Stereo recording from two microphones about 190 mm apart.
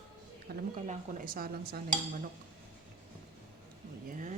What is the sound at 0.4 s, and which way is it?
Speech, 50° right (ahead or behind).